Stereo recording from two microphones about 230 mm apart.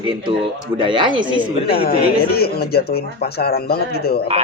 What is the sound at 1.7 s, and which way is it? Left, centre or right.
Speech, left.